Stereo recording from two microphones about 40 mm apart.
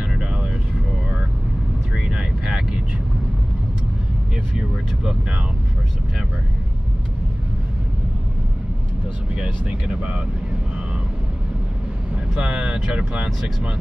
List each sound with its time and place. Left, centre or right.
2.0 s vehicle: centre
9.3 s speech: right
12.4 s speech: right